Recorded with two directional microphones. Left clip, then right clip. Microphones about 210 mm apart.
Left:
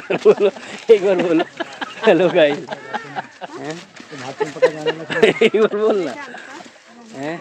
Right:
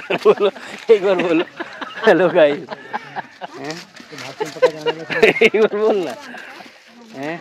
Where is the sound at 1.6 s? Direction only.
15° left (ahead or behind).